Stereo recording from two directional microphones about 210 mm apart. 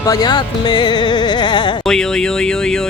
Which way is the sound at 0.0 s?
20° left (ahead or behind).